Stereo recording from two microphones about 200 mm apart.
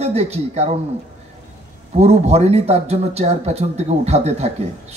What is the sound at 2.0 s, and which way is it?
Speech, 30° right (ahead or behind).